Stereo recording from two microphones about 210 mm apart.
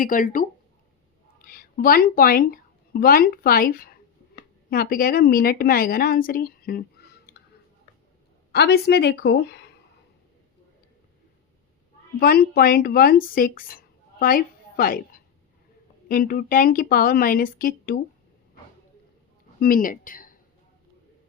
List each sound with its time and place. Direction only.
0.0 s a woman's voice: 40° left (ahead or behind)
8.5 s a woman's voice: 50° left (ahead or behind)
12.2 s speech: 45° left (ahead or behind)
16.0 s a woman's voice: 45° left (ahead or behind)
19.5 s speech: 45° left (ahead or behind)